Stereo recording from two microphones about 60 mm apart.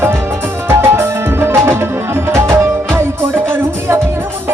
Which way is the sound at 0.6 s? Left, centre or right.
Right.